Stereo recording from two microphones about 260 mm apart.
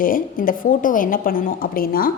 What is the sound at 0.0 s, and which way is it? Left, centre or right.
A woman's voice, left.